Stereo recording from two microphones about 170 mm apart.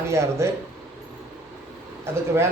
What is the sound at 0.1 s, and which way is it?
Speech, 15° right (ahead or behind).